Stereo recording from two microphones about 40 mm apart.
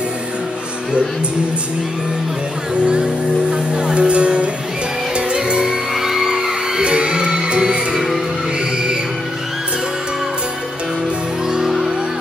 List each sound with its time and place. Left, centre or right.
2.8 s music: right
5.9 s music: centre
6.3 s music: right
11.4 s music: centre